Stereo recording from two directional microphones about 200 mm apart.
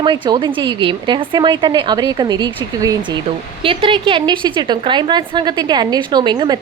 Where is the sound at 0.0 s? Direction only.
25° right (ahead or behind).